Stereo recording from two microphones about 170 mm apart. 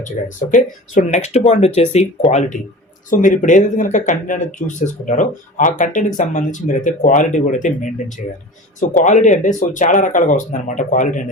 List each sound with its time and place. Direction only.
0.0 s speech: 50° left (ahead or behind)